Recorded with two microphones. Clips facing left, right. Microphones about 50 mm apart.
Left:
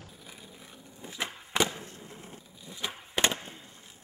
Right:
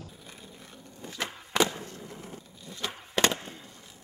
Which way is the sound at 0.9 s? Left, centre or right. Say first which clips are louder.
Right 1 dB; centre.